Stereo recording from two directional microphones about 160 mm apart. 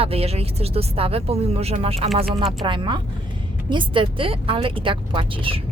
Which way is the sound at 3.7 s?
30° right (ahead or behind).